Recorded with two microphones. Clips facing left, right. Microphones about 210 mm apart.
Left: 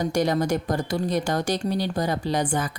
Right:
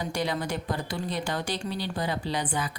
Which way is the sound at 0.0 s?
45° left (ahead or behind).